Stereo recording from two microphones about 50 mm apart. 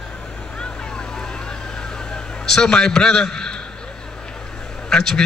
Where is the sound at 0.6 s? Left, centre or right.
Centre.